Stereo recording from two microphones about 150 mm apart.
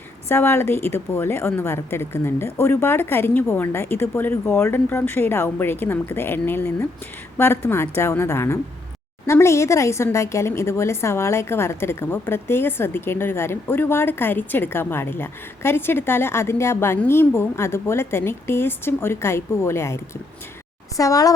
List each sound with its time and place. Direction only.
0.3 s a woman's voice: 15° left (ahead or behind)